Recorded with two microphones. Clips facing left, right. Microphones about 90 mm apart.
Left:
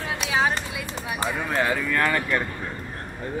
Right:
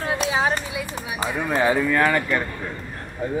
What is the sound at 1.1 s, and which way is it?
Speech, 10° right (ahead or behind).